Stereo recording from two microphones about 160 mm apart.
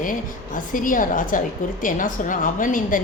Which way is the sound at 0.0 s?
55° left (ahead or behind).